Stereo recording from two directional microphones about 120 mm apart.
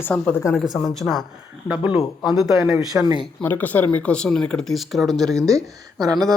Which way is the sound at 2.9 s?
15° right (ahead or behind).